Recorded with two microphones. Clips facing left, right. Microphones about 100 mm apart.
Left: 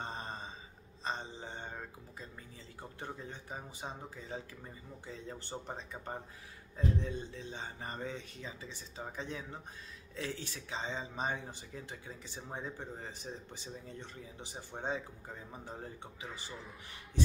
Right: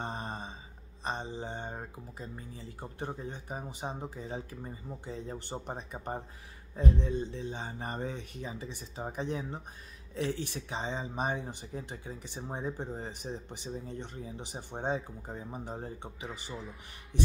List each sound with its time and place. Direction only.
0.0 s mantra: 20° right (ahead or behind)
1.0 s speech: 15° right (ahead or behind)